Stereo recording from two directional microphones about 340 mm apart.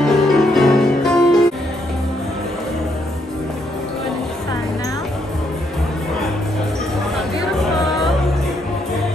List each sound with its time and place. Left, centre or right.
0.0 s music: centre